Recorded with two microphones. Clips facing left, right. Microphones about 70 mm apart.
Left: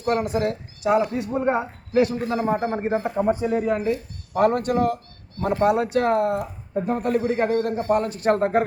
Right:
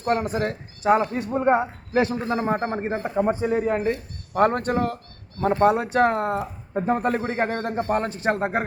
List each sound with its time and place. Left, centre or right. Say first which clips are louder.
0.0 s speech: left 1 dB; right
8.2 s speech: left 4 dB; centre